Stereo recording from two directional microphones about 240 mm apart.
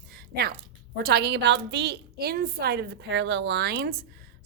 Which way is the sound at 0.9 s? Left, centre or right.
Right.